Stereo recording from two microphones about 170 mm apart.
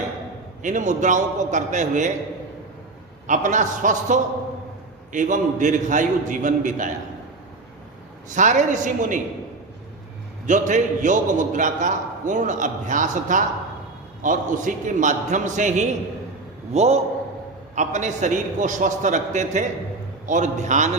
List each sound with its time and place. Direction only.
0.6 s a man's voice: 45° right (ahead or behind)
3.2 s a man's voice: 50° right (ahead or behind)
8.3 s a man's voice: 45° right (ahead or behind)
10.4 s a man's voice: 45° right (ahead or behind)